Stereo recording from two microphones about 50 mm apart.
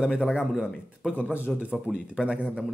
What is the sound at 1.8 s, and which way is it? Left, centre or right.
Speech, centre.